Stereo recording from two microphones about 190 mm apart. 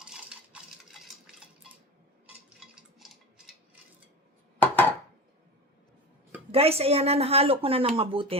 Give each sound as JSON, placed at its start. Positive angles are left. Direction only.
{"t": 0.0, "sound": "cutlery", "side_deg": -5}
{"t": 4.6, "sound": "dishes", "side_deg": 10}
{"t": 6.5, "sound": "a woman's voice", "side_deg": -30}